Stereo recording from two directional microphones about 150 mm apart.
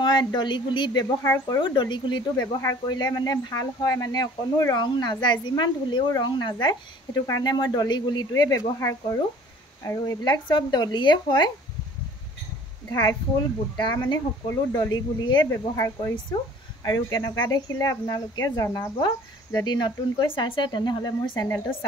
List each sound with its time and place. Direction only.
0.0 s speech: 30° left (ahead or behind)
1.2 s speech: 20° left (ahead or behind)
1.6 s speech: 30° left (ahead or behind)
13.7 s speech: 30° left (ahead or behind)